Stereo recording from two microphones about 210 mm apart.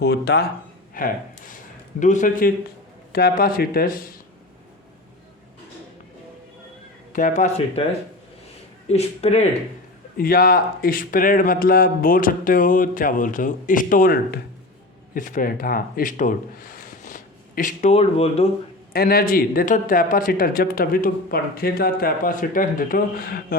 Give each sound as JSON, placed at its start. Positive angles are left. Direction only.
{"t": 0.0, "sound": "a man's voice", "side_deg": 50}
{"t": 7.1, "sound": "a man's voice", "side_deg": 40}
{"t": 8.9, "sound": "a man's voice", "side_deg": 30}
{"t": 10.2, "sound": "a man's voice", "side_deg": 45}
{"t": 18.9, "sound": "speech", "side_deg": 45}